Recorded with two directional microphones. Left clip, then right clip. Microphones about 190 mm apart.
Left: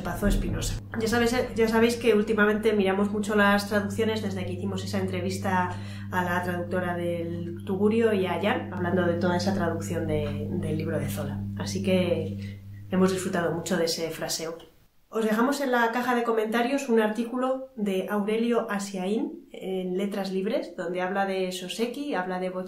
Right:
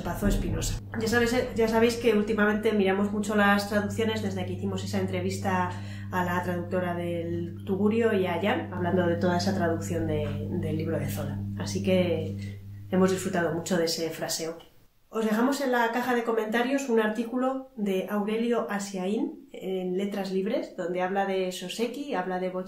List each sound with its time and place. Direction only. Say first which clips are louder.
0.2 s speech: left 1 dB; 15° left (ahead or behind)
11.9 s speech: even; 15° left (ahead or behind)